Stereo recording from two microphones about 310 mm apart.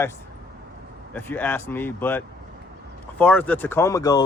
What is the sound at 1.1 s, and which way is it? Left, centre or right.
Speech, centre.